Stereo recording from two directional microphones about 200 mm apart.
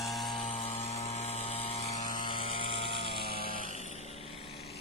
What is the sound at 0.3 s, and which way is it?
Vehicle, 35° left (ahead or behind).